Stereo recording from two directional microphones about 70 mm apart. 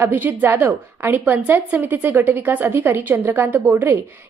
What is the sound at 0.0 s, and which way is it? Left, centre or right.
A woman's voice, right.